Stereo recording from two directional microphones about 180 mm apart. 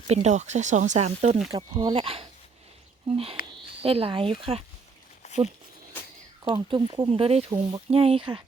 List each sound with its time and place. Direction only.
0.1 s speech: 40° right (ahead or behind)
1.5 s speech: 25° right (ahead or behind)
5.2 s a sound: 40° left (ahead or behind)
6.5 s speech: 25° right (ahead or behind)